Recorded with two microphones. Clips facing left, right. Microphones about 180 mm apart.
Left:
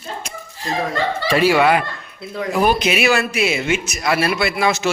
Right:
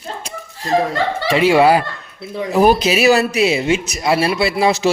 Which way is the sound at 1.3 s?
20° right (ahead or behind).